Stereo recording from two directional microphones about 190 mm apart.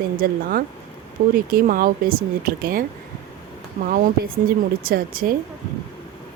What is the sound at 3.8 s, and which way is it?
Speech, 50° right (ahead or behind).